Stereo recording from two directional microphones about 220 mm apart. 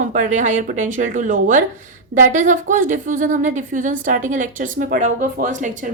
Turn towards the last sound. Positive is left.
turn(degrees=-35)  # may be behind; listen again after turning